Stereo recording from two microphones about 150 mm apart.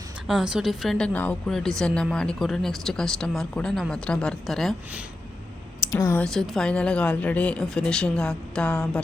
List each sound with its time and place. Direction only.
0.3 s a woman's voice: 5° right (ahead or behind)
5.9 s speech: 20° left (ahead or behind)
6.2 s a woman's voice: centre (ahead or behind)